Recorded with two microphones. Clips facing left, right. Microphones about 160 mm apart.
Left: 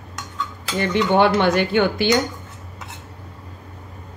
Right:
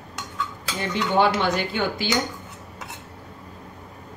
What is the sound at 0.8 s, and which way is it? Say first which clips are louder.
Speech: left 4 dB; 65° left (ahead or behind).